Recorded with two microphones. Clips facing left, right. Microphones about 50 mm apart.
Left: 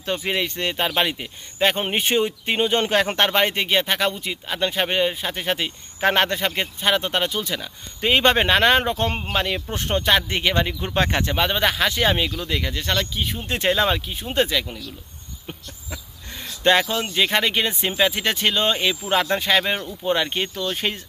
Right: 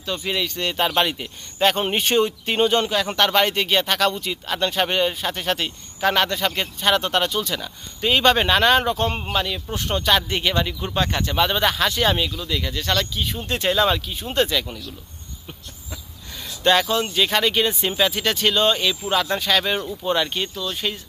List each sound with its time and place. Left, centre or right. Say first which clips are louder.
0.2 s speech: left 1 dB; left
0.8 s speech: right 2 dB; centre
2.8 s speech: left 2 dB; left
3.3 s speech: right 1 dB; left
5.9 s speech: left 1 dB; left
6.5 s speech: right 1 dB; centre
8.0 s speech: even; left
11.0 s speech: left 2 dB; left
11.3 s speech: right 3 dB; left
15.4 s a sound: left 4 dB; left
16.8 s speech: right 1 dB; centre
20.6 s speech: left 2 dB; left